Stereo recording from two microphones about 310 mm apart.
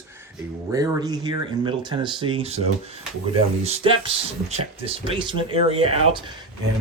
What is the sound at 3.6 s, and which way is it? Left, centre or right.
Speech, centre.